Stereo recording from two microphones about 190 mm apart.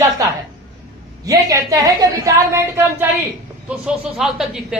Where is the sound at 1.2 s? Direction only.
15° right (ahead or behind).